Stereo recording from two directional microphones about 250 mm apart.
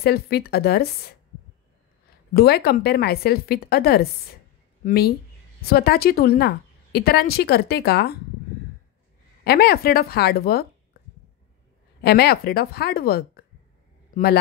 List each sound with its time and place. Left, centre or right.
0.0 s a woman's voice: left
2.3 s a woman's voice: left
9.4 s speech: left
12.0 s a woman's voice: left